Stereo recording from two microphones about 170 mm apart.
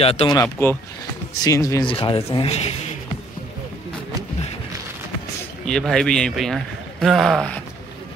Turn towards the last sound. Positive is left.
turn(degrees=0)  # may be behind; listen again after turning